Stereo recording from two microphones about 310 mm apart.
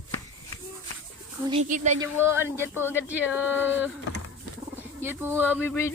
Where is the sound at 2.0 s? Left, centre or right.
Centre.